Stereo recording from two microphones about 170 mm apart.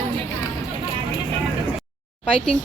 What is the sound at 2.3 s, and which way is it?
Speech, 5° left (ahead or behind).